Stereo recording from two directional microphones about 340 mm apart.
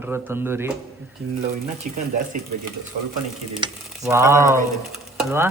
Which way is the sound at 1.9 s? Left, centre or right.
Right.